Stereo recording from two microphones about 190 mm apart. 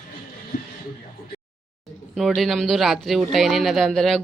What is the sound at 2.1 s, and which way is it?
Speech, centre (ahead or behind).